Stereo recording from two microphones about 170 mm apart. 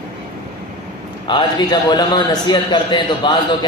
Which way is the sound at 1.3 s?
30° left (ahead or behind).